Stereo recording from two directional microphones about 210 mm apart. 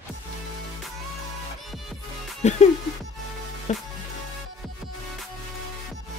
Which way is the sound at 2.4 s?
35° left (ahead or behind).